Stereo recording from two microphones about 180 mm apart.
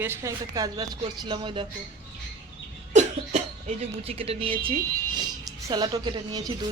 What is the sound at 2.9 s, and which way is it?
Throat clearing, 40° right (ahead or behind).